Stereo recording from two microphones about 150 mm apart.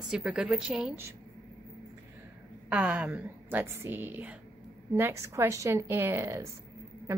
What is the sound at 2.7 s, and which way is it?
A woman's voice, 10° right (ahead or behind).